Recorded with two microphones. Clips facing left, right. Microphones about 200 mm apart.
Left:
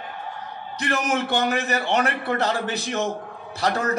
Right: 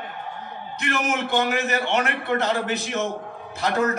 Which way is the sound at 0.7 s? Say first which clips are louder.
Left 1 dB; 35° left (ahead or behind).